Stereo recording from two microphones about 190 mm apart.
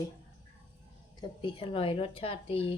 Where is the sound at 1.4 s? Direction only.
25° left (ahead or behind).